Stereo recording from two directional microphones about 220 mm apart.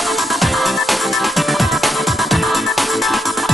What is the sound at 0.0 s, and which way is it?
Music, centre (ahead or behind).